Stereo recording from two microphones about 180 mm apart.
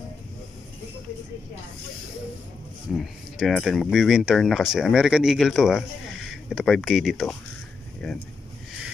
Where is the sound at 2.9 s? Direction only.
Centre (ahead or behind).